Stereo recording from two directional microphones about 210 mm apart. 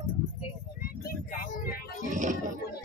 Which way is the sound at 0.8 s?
45° left (ahead or behind).